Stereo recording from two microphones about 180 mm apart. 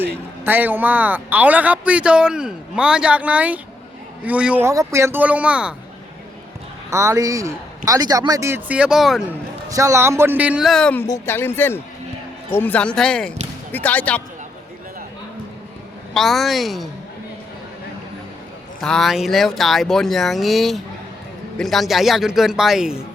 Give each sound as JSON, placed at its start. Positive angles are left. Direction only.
{"t": 0.4, "sound": "speech", "side_deg": -10}
{"t": 6.9, "sound": "speech", "side_deg": -15}
{"t": 9.6, "sound": "speech", "side_deg": -15}
{"t": 16.1, "sound": "speech", "side_deg": 0}
{"t": 18.8, "sound": "speech", "side_deg": 0}